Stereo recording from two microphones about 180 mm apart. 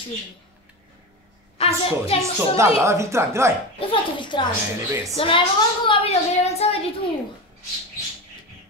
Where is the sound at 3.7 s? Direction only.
25° left (ahead or behind).